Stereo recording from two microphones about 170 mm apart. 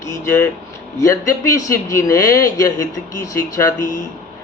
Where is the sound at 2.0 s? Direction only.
15° left (ahead or behind).